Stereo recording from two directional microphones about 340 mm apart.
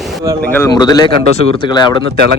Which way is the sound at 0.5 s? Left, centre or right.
Centre.